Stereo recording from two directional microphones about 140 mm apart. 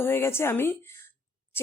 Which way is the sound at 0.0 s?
15° left (ahead or behind).